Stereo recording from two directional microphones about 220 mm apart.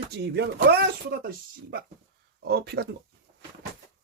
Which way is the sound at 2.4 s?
45° right (ahead or behind).